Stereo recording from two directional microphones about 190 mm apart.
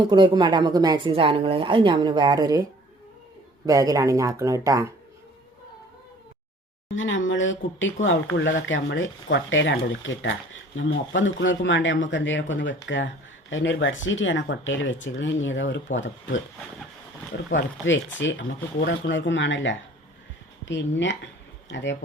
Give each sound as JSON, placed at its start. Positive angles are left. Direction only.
{"t": 0.1, "sound": "a woman's voice", "side_deg": -25}
{"t": 3.7, "sound": "speech", "side_deg": -15}
{"t": 6.9, "sound": "speech", "side_deg": 85}
{"t": 8.4, "sound": "speech", "side_deg": 70}
{"t": 17.5, "sound": "speech", "side_deg": 75}